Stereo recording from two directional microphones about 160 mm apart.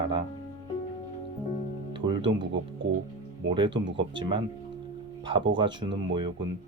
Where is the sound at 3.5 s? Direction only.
30° right (ahead or behind).